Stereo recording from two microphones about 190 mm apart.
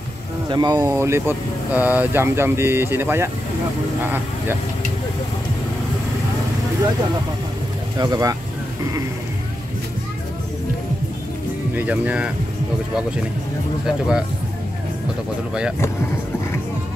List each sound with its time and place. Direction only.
0.5 s speech: 20° right (ahead or behind)
8.0 s speech: 20° right (ahead or behind)
11.7 s speech: 10° right (ahead or behind)
13.8 s speech: 5° right (ahead or behind)